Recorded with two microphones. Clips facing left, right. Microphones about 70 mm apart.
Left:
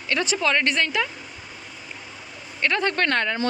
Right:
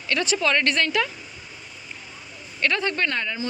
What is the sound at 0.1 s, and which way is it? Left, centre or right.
Speech, left.